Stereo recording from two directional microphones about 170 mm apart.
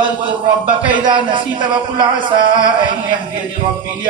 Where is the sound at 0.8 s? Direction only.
30° right (ahead or behind).